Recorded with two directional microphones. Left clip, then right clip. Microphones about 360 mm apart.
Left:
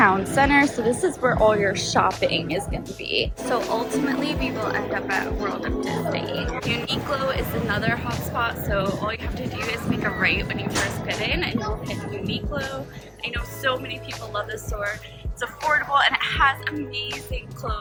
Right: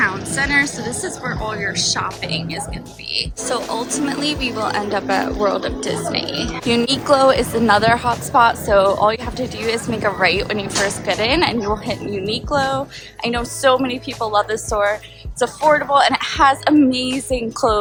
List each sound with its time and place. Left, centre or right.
0.0 s speech: centre
13.2 s speech: centre